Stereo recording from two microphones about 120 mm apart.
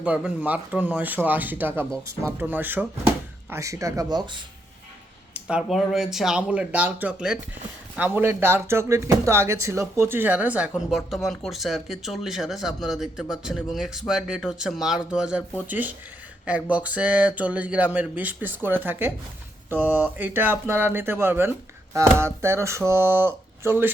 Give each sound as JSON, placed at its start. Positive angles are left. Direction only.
{"t": 0.0, "sound": "speech", "side_deg": -10}
{"t": 3.5, "sound": "speech", "side_deg": -25}
{"t": 5.3, "sound": "speech", "side_deg": -10}